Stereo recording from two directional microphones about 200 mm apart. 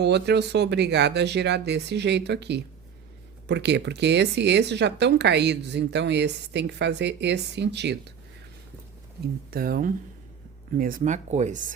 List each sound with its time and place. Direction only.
0.0 s speech: 55° right (ahead or behind)
9.5 s speech: 45° right (ahead or behind)